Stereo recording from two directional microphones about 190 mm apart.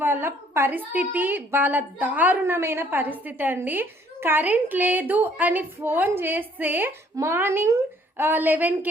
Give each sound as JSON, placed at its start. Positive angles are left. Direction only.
{"t": 0.0, "sound": "a woman's voice", "side_deg": -10}